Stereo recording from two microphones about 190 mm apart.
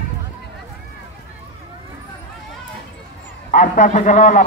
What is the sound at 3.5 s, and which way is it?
Speech, 40° left (ahead or behind).